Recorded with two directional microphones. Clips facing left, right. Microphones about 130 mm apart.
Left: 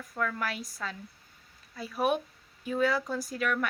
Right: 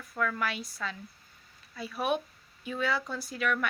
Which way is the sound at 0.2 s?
30° left (ahead or behind).